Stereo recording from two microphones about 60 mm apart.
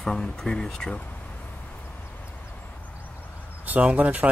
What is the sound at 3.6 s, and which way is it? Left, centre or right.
Speech, right.